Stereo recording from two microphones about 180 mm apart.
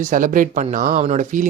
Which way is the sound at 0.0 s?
50° right (ahead or behind).